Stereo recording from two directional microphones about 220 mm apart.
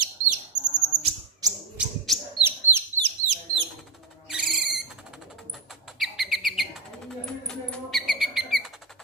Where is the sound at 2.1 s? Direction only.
Centre (ahead or behind).